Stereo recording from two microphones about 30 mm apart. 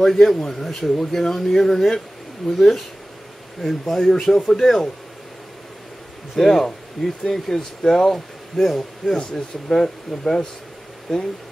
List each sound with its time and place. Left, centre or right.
0.0 s speech: centre
6.3 s speech: centre
8.5 s a man's voice: centre
9.1 s speech: left